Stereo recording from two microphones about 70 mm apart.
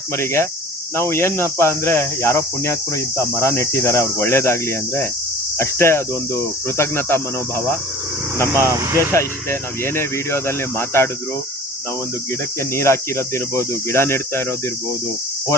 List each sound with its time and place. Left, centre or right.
0.1 s speech: left
8.6 s speech: right
9.1 s speech: left
12.7 s speech: left